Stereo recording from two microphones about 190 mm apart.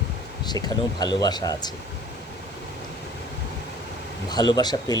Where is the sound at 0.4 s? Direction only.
20° left (ahead or behind).